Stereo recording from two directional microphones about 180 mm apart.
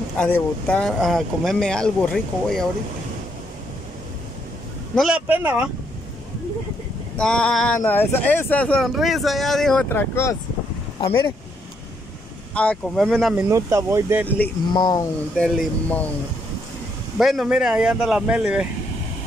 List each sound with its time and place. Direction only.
0.2 s speech: 5° left (ahead or behind)
4.9 s speech: 5° right (ahead or behind)
7.2 s speech: 5° left (ahead or behind)
9.8 s speech: 15° left (ahead or behind)
11.0 s speech: 30° left (ahead or behind)
12.5 s speech: 5° left (ahead or behind)
13.4 s speech: 15° right (ahead or behind)
14.7 s speech: 25° left (ahead or behind)
15.3 s speech: 5° left (ahead or behind)
17.2 s speech: centre (ahead or behind)